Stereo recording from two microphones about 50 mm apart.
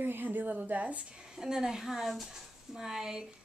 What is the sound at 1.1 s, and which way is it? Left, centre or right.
A woman's voice, centre.